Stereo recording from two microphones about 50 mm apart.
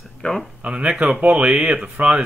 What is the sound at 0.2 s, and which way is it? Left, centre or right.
Speech, left.